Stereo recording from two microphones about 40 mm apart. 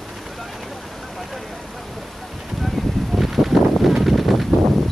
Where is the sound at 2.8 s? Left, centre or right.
Centre.